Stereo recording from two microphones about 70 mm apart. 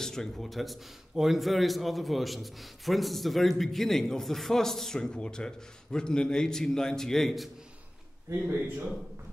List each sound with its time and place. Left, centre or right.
0.0 s a man's voice: centre
8.3 s speech: right